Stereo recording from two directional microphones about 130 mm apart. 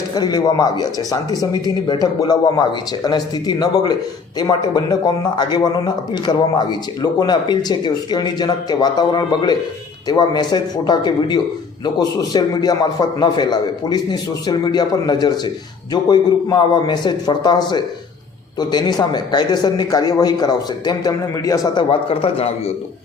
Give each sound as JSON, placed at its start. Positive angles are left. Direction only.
{"t": 0.1, "sound": "speech", "side_deg": 30}
{"t": 21.8, "sound": "a man's voice", "side_deg": 45}